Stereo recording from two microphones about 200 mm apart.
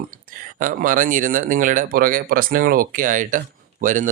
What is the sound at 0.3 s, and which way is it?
Speech, 45° right (ahead or behind).